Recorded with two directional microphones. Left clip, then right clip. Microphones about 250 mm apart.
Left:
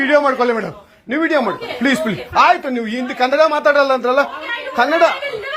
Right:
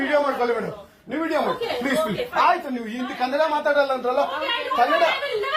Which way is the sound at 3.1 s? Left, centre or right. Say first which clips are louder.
Left 8 dB; left.